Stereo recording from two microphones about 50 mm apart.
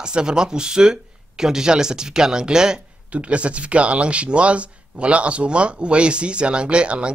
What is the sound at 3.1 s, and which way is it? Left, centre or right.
Speech, right.